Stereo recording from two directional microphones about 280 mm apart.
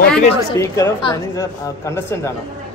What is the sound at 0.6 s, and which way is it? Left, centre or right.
Speech, centre.